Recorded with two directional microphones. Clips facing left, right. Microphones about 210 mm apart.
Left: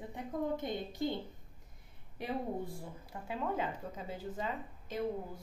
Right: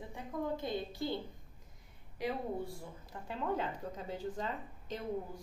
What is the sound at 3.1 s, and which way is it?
Speech, 5° left (ahead or behind).